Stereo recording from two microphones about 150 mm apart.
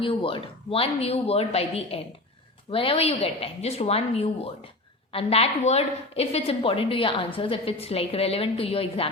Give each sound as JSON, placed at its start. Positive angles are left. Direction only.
{"t": 0.0, "sound": "a woman's voice", "side_deg": 35}